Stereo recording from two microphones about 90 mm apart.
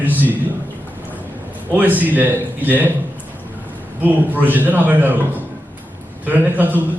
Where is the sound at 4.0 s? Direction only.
20° right (ahead or behind).